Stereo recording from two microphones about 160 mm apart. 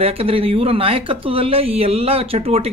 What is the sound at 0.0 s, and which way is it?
Speech, 35° right (ahead or behind).